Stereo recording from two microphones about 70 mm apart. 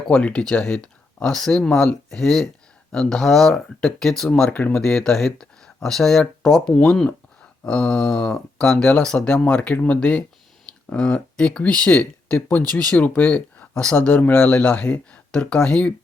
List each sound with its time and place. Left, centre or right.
0.1 s speech: centre
4.5 s speech: centre
4.8 s speech: centre